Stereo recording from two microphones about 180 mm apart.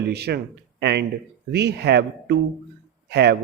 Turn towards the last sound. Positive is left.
turn(degrees=-65)  # may be behind; listen again after turning